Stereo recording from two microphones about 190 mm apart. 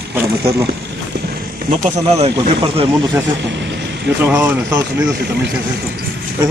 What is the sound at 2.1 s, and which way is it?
Speech, 20° right (ahead or behind).